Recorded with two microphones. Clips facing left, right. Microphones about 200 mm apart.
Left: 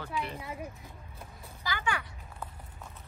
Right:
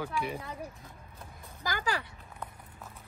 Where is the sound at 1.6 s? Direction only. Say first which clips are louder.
Right 1 dB; 40° right (ahead or behind).